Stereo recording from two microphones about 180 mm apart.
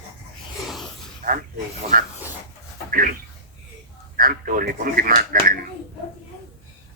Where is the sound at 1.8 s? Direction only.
35° right (ahead or behind).